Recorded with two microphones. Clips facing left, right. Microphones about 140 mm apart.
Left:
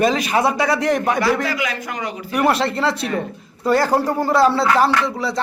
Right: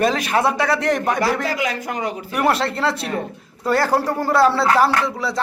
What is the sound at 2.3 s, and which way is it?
Speech, centre (ahead or behind).